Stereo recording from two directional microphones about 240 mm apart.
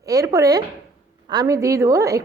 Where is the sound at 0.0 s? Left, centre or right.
Centre.